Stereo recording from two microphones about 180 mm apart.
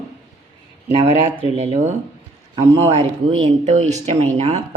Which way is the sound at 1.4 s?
35° right (ahead or behind).